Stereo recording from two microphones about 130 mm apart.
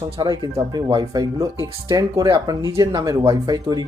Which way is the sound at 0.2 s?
30° right (ahead or behind).